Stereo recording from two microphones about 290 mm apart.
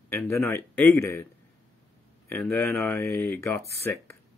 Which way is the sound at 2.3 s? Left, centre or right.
Centre.